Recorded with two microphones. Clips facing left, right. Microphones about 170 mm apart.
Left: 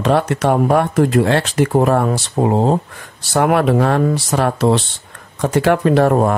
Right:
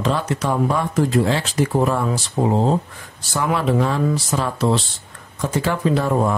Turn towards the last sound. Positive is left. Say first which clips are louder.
# left 5 dB
turn(degrees=65)  # may be behind; listen again after turning